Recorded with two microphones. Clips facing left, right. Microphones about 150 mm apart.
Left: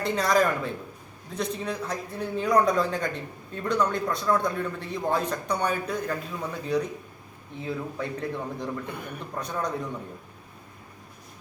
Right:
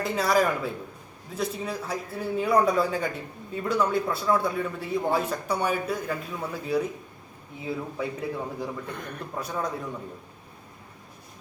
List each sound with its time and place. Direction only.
0.0 s a man's voice: 5° right (ahead or behind)
8.9 s a man's voice: 10° left (ahead or behind)
9.3 s a man's voice: 5° right (ahead or behind)